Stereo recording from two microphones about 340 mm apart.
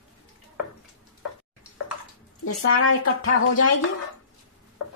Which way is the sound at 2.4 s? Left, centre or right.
Left.